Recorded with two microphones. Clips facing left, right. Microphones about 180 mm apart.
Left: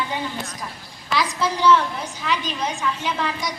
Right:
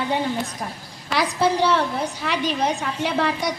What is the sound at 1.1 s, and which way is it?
A woman's voice, 60° right (ahead or behind).